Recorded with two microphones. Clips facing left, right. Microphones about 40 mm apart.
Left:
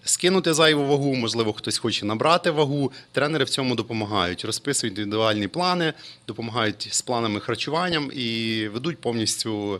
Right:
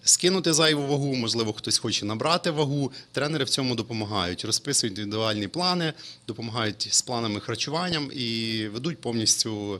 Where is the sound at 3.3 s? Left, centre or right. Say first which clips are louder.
Left 3 dB; centre.